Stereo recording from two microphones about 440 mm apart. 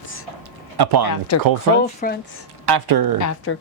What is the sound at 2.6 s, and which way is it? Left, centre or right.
Speech, right.